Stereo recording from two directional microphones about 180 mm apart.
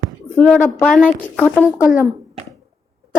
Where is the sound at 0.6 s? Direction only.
5° left (ahead or behind).